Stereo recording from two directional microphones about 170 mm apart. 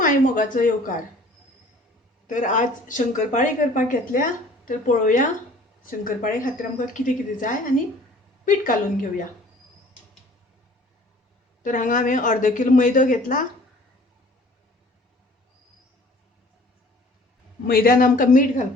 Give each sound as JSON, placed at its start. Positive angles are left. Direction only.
{"t": 0.0, "sound": "speech", "side_deg": 50}
{"t": 2.2, "sound": "speech", "side_deg": 50}
{"t": 11.6, "sound": "speech", "side_deg": 50}
{"t": 17.7, "sound": "speech", "side_deg": 60}